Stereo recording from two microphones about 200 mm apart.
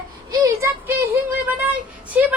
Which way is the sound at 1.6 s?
5° right (ahead or behind).